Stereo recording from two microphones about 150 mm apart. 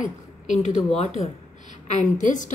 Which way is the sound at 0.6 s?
50° left (ahead or behind).